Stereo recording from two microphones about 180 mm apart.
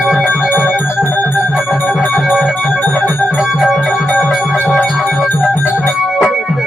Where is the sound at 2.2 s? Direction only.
Centre (ahead or behind).